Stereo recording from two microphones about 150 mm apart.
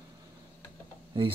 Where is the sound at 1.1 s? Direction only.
30° right (ahead or behind).